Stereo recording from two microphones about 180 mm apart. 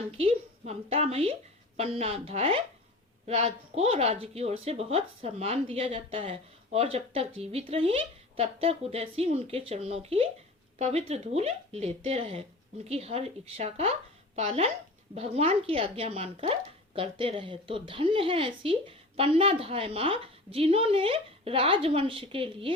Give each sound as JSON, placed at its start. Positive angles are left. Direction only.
{"t": 0.2, "sound": "speech", "side_deg": -35}